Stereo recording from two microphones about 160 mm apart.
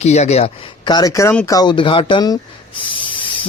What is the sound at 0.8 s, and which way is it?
Speech, 25° left (ahead or behind).